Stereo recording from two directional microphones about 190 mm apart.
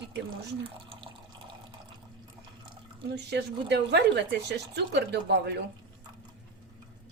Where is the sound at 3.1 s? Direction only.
60° right (ahead or behind).